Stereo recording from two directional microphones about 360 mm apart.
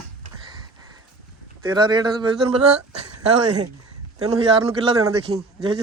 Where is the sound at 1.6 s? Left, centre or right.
Centre.